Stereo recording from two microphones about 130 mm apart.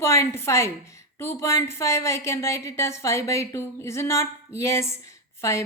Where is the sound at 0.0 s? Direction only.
20° left (ahead or behind).